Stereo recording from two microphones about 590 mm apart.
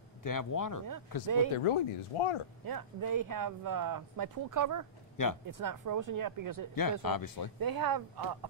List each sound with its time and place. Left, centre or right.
0.2 s a man's voice: left
1.2 s speech: right
1.6 s speech: left
2.6 s speech: right
5.1 s speech: left
5.5 s speech: right
6.7 s a man's voice: left
7.6 s speech: right